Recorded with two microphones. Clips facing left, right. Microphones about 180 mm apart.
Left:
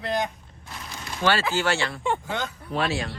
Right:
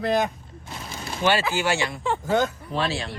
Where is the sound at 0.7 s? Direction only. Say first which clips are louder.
Right 3 dB; 30° right (ahead or behind).